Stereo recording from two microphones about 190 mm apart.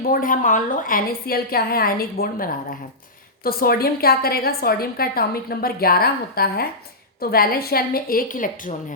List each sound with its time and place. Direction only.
0.0 s a woman's voice: 45° left (ahead or behind)